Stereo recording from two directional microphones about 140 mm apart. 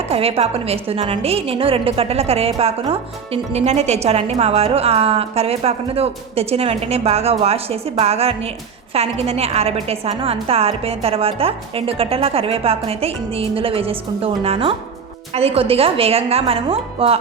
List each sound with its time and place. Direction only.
0.1 s a woman's voice: 45° right (ahead or behind)